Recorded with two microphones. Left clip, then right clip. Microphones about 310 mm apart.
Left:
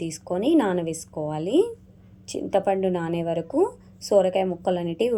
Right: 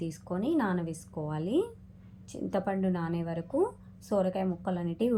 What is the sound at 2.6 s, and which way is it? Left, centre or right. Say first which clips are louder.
A woman's voice: left 9 dB; left.